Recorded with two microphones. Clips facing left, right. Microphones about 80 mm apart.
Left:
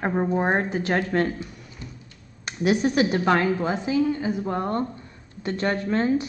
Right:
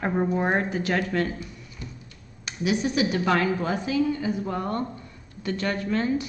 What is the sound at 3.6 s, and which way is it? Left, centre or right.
A woman's voice, left.